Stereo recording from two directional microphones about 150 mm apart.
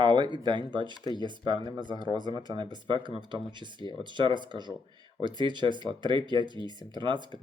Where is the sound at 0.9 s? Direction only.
30° left (ahead or behind).